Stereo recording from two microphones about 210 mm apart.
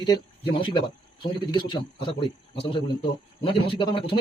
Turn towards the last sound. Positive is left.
turn(degrees=25)  # may be behind; listen again after turning